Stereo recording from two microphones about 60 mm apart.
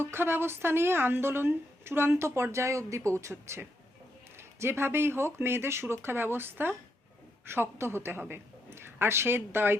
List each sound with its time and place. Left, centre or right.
0.0 s a woman's voice: right